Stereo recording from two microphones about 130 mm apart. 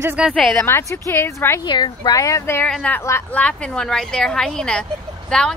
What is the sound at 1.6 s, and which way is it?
Speech, 35° left (ahead or behind).